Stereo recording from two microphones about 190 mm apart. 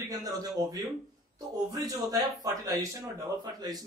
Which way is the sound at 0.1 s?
20° right (ahead or behind).